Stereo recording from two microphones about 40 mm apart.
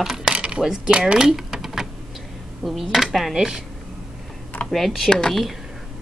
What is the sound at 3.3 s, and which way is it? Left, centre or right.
Speech, centre.